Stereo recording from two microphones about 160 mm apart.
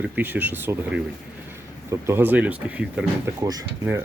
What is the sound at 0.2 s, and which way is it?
Speech, 10° right (ahead or behind).